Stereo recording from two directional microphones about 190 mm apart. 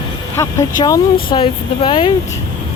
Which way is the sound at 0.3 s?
20° left (ahead or behind).